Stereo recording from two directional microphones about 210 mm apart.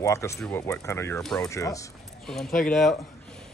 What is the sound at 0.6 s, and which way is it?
Speech, 15° left (ahead or behind).